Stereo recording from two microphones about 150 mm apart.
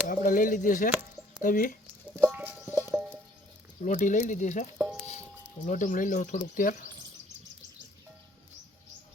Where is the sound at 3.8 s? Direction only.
55° left (ahead or behind).